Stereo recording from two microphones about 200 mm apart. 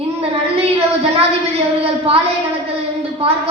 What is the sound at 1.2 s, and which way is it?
Speech, 30° right (ahead or behind).